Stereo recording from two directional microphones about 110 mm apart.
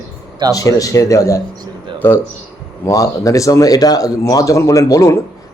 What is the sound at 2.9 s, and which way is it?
Speech, 30° left (ahead or behind).